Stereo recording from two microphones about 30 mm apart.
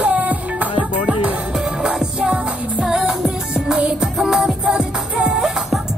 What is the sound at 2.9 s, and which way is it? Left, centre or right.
Music, right.